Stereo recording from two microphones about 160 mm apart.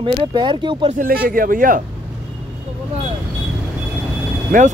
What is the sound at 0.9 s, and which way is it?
Speech, 65° right (ahead or behind).